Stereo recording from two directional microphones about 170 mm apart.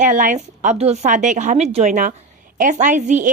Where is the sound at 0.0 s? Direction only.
50° right (ahead or behind).